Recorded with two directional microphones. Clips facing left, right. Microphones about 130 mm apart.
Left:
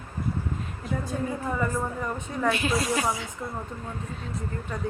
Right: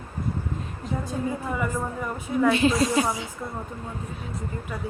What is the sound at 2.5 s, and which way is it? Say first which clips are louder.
Speech: right 3 dB; 25° right (ahead or behind).